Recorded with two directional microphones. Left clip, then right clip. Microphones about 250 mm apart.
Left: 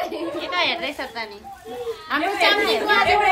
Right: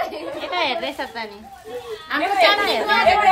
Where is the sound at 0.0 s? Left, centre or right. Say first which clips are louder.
Even; centre.